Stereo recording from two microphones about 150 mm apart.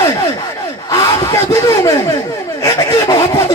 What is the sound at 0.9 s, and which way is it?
Speech, 20° left (ahead or behind).